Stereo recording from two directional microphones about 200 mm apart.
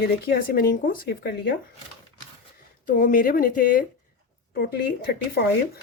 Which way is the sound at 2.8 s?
45° left (ahead or behind).